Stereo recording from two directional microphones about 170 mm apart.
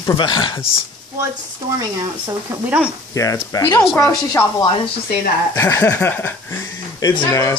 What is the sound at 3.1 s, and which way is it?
Speech, 20° left (ahead or behind).